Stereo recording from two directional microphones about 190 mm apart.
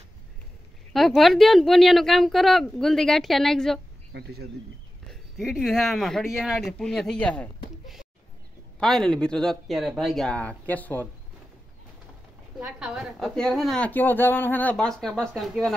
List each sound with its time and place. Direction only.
0.9 s a woman's voice: centre (ahead or behind)
4.1 s speech: 60° right (ahead or behind)
5.0 s a woman's voice: centre (ahead or behind)
12.5 s a woman's voice: 5° right (ahead or behind)